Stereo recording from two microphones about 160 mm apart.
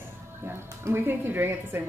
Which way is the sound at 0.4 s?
15° right (ahead or behind).